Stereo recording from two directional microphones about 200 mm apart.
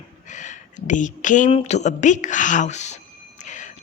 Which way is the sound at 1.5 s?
35° left (ahead or behind).